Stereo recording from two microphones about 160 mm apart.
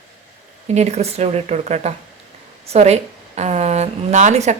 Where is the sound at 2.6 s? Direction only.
40° right (ahead or behind).